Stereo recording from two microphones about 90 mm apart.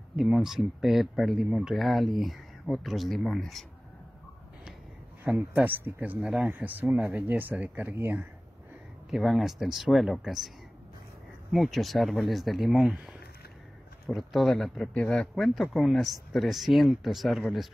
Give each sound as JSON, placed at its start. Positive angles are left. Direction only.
{"t": 0.1, "sound": "speech", "side_deg": -5}
{"t": 5.2, "sound": "speech", "side_deg": -15}
{"t": 9.1, "sound": "speech", "side_deg": 0}
{"t": 11.5, "sound": "speech", "side_deg": 0}